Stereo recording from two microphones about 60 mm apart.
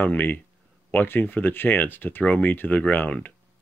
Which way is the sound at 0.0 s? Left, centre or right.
Left.